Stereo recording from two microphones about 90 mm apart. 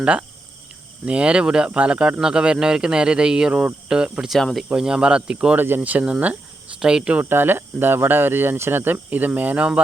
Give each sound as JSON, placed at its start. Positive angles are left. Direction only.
{"t": 0.0, "sound": "speech", "side_deg": -15}
{"t": 4.4, "sound": "speech", "side_deg": 5}
{"t": 4.7, "sound": "speech", "side_deg": -10}
{"t": 7.3, "sound": "speech", "side_deg": -25}